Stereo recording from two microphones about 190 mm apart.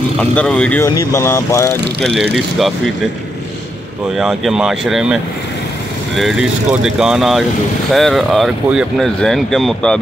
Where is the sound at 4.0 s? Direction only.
Centre (ahead or behind).